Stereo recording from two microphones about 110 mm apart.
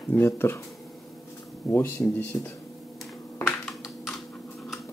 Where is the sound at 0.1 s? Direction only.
20° left (ahead or behind).